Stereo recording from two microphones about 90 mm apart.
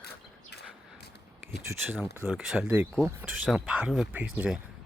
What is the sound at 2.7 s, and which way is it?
Speech, 15° right (ahead or behind).